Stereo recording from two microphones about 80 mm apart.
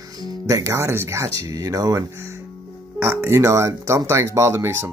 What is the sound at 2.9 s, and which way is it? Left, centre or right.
Speech, right.